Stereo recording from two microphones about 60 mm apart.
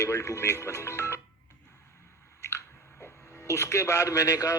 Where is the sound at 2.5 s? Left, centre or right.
Left.